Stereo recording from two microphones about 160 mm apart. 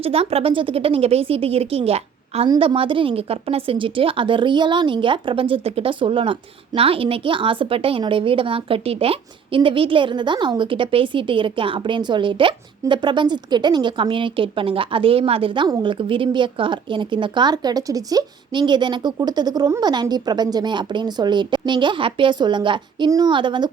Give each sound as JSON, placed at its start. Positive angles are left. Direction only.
{"t": 0.0, "sound": "a woman's voice", "side_deg": -40}